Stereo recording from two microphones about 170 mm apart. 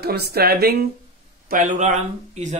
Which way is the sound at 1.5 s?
50° right (ahead or behind).